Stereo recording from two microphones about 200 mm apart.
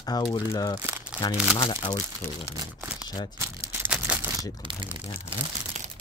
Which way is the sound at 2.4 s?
10° right (ahead or behind).